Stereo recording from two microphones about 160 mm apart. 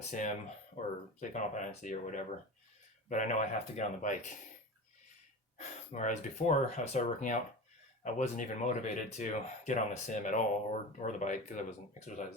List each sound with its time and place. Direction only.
0.1 s speech: 50° left (ahead or behind)
5.5 s speech: 50° left (ahead or behind)